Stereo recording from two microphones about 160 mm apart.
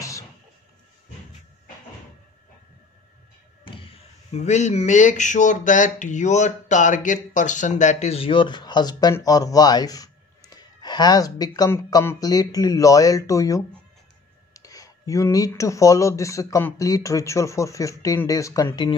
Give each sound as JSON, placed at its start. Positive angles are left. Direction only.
{"t": 3.6, "sound": "slam", "side_deg": 35}
{"t": 4.4, "sound": "speech", "side_deg": 45}